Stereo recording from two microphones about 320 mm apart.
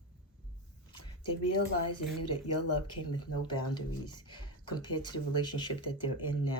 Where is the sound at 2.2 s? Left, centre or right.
Left.